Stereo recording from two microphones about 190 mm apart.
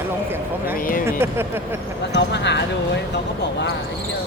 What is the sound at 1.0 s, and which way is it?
Speech, 10° right (ahead or behind).